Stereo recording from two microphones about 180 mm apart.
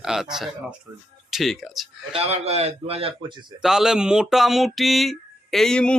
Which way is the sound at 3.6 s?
5° right (ahead or behind).